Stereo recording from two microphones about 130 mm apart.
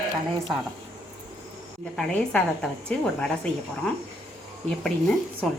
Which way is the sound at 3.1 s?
5° left (ahead or behind).